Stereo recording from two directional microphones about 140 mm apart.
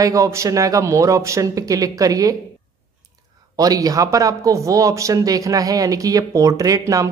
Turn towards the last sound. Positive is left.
turn(degrees=-25)  # may be behind; listen again after turning